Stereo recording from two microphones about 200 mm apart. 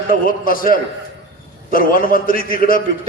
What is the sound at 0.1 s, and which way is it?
A man's voice, 45° left (ahead or behind).